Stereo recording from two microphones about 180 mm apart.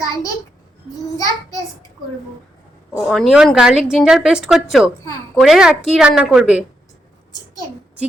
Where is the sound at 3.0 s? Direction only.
Centre (ahead or behind).